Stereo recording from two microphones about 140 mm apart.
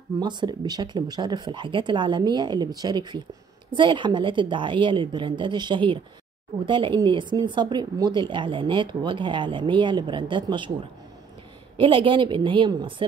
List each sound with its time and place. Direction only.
0.2 s speech: 30° right (ahead or behind)
11.7 s speech: 35° right (ahead or behind)